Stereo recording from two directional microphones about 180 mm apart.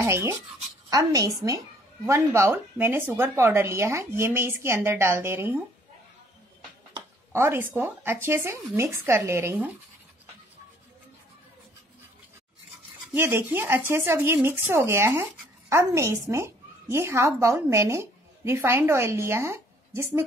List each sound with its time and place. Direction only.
0.0 s a woman's voice: 15° right (ahead or behind)
7.3 s speech: 10° right (ahead or behind)
13.1 s a woman's voice: 10° right (ahead or behind)